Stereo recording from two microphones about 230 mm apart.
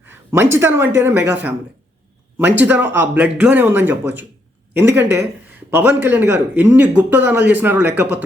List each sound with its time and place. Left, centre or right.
0.0 s a man's voice: centre